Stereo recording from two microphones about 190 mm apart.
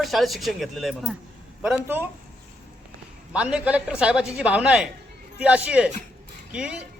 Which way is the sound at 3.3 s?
5° right (ahead or behind).